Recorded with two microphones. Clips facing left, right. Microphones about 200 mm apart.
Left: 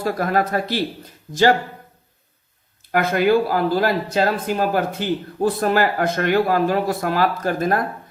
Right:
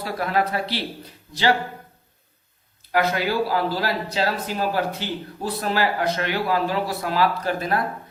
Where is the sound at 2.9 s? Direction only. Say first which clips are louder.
Left 5 dB; 50° left (ahead or behind).